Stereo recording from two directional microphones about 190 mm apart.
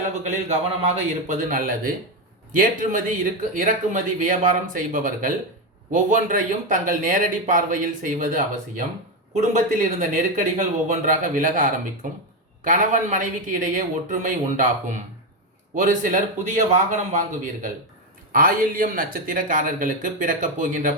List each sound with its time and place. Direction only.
0.3 s a man's voice: 35° right (ahead or behind)